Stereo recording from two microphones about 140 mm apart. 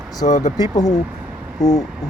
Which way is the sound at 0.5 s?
30° left (ahead or behind).